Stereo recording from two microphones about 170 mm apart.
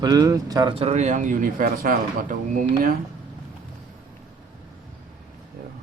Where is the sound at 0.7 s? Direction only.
35° right (ahead or behind); by 3.0 s 55° right (ahead or behind).